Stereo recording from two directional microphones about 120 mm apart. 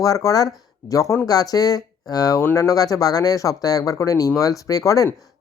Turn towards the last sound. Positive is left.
turn(degrees=30)  # may be behind; listen again after turning